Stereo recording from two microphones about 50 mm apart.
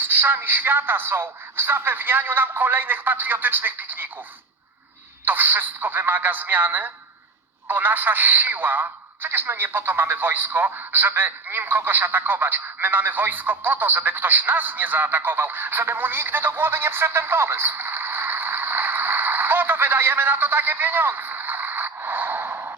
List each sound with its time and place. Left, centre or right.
0.0 s speech: right
5.2 s a man's voice: right